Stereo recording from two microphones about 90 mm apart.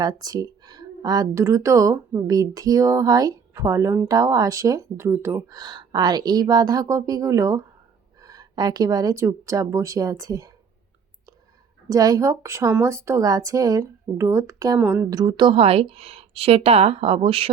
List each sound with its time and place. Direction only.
0.0 s speech: 45° right (ahead or behind)
1.4 s speech: 35° right (ahead or behind)
5.5 s a woman's voice: 50° right (ahead or behind)
11.9 s speech: 40° right (ahead or behind)
14.8 s speech: 20° right (ahead or behind)
15.1 s speech: 45° right (ahead or behind); by 17.5 s 90° right